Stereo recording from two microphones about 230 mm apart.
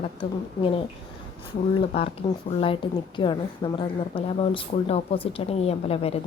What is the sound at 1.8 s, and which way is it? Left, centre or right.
Speech, left.